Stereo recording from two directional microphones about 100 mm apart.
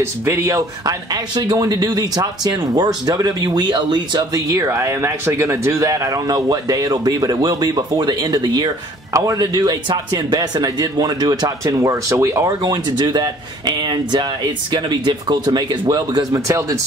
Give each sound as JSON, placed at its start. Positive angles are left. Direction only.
{"t": 0.0, "sound": "speech", "side_deg": -30}
{"t": 4.5, "sound": "speech", "side_deg": -30}